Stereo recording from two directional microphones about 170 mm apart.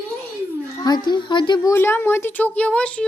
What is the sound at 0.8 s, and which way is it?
Speech, 25° left (ahead or behind).